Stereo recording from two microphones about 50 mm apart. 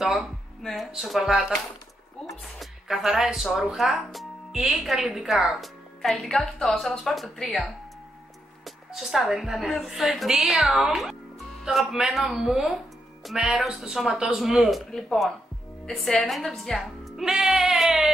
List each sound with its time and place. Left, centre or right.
0.0 s a woman's voice: centre
2.6 s a woman's voice: centre
8.6 s a woman's voice: centre
14.9 s a woman's voice: centre
17.2 s music: centre